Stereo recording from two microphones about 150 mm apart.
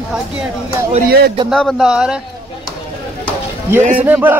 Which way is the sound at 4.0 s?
10° right (ahead or behind).